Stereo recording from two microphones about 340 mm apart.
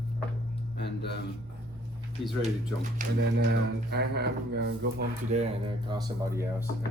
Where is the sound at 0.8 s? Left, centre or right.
Left.